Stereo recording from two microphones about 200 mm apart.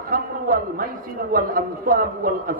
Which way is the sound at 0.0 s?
45° right (ahead or behind).